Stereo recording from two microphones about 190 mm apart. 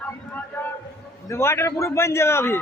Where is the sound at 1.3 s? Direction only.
15° left (ahead or behind).